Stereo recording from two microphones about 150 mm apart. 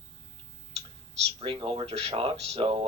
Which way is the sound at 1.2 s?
40° right (ahead or behind).